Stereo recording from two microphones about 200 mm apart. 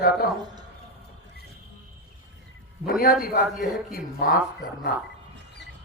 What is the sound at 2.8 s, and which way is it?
Speech, 45° left (ahead or behind).